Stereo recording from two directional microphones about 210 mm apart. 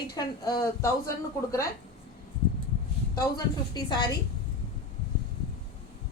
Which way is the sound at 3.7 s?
20° left (ahead or behind).